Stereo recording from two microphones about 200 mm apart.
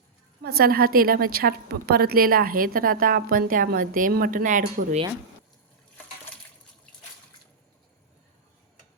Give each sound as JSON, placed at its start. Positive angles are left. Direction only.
{"t": 0.4, "sound": "a woman's voice", "side_deg": -50}